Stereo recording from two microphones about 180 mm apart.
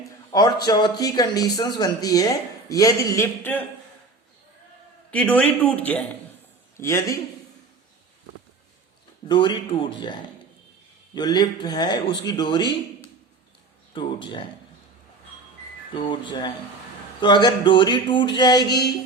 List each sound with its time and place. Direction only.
0.3 s speech: 20° left (ahead or behind)
5.1 s a man's voice: 10° left (ahead or behind)
9.2 s speech: 25° left (ahead or behind)
13.9 s speech: 25° left (ahead or behind)
15.9 s speech: 25° left (ahead or behind)